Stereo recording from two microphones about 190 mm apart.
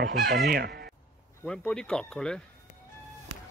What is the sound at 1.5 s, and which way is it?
Speech, 5° left (ahead or behind).